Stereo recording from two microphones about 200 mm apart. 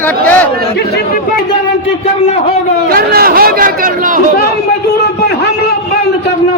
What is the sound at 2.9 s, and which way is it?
Speech, 50° right (ahead or behind).